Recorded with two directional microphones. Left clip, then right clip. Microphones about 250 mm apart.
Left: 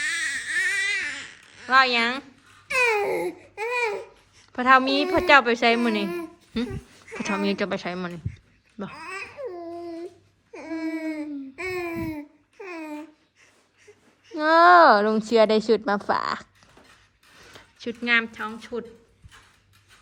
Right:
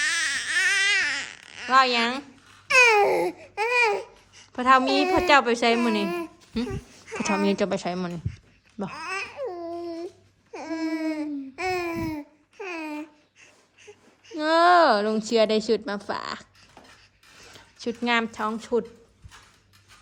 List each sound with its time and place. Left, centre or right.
0.0 s baby cry: centre
1.7 s a woman's voice: centre
2.6 s babbling: centre
7.2 s a woman's voice: centre
9.1 s babbling: centre
10.8 s a sound: centre
11.7 s babbling: centre
14.3 s a woman's voice: centre
17.5 s speech: centre